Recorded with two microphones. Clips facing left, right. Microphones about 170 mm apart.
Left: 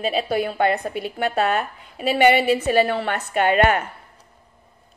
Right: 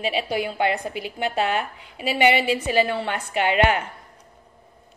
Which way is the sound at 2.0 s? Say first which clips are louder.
Left 3 dB; 15° right (ahead or behind).